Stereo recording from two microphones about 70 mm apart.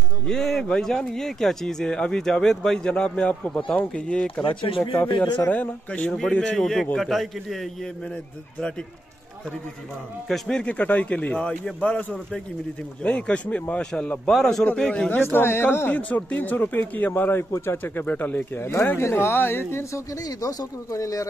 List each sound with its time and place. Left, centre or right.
0.3 s speech: centre
5.0 s speech: left
5.5 s a man's voice: centre
10.2 s a man's voice: centre
10.6 s a man's voice: centre
15.3 s speech: left
15.9 s a man's voice: left
20.2 s speech: left